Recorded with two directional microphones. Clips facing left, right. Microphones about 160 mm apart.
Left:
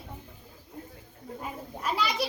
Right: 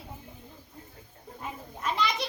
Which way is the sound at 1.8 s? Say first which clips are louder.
Even; 10° left (ahead or behind).